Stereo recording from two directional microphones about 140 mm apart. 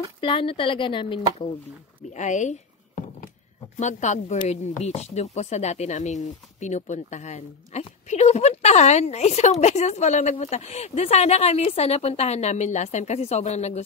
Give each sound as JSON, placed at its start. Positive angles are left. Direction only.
{"t": 0.2, "sound": "speech", "side_deg": 40}
{"t": 2.0, "sound": "a woman's voice", "side_deg": 60}
{"t": 3.7, "sound": "a woman's voice", "side_deg": 60}